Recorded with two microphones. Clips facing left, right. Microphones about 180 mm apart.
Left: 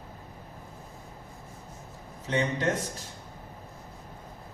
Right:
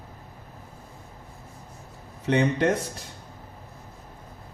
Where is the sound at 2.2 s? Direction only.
65° right (ahead or behind).